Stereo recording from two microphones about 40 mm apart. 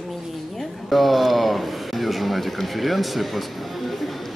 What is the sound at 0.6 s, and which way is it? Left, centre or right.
Speech, centre.